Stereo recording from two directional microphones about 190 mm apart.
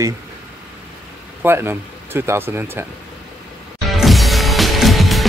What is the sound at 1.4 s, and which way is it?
Speech, 10° right (ahead or behind).